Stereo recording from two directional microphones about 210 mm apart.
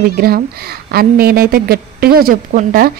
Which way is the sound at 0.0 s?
45° right (ahead or behind).